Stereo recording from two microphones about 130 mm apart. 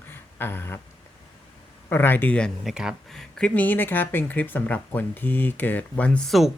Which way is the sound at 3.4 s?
10° left (ahead or behind).